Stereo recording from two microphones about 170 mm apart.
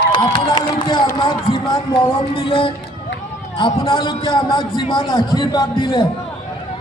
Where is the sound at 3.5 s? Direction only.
30° left (ahead or behind).